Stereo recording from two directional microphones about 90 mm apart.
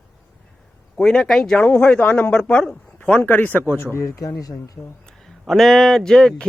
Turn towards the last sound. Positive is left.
turn(degrees=5)  # may be behind; listen again after turning